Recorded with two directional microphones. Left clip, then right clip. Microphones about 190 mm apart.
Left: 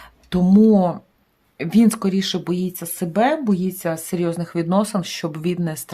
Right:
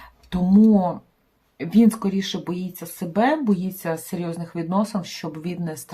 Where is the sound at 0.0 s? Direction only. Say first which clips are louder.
Left 5 dB; 50° left (ahead or behind).